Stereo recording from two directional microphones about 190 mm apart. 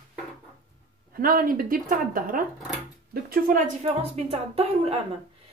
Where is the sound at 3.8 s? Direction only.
35° right (ahead or behind).